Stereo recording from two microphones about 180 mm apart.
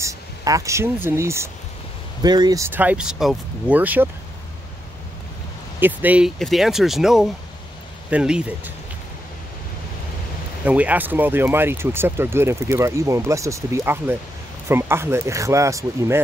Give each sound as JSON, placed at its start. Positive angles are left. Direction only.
{"t": 0.0, "sound": "speech", "side_deg": -15}
{"t": 5.8, "sound": "speech", "side_deg": -10}
{"t": 10.6, "sound": "speech", "side_deg": -10}